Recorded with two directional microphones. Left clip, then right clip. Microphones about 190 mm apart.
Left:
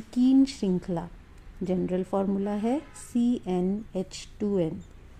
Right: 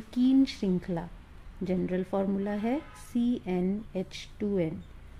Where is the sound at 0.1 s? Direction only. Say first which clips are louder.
Left 3 dB; 15° left (ahead or behind).